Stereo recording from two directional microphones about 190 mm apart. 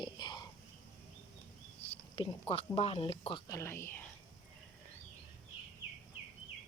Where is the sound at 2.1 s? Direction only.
30° left (ahead or behind).